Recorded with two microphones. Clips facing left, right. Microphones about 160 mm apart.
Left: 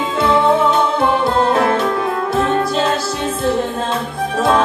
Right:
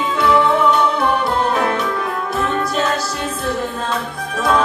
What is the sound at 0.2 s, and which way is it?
Music, 25° left (ahead or behind).